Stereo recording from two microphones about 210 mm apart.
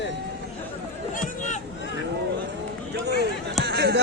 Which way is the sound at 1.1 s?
35° left (ahead or behind).